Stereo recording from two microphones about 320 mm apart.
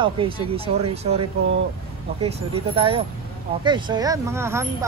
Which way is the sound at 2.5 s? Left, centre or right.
Centre.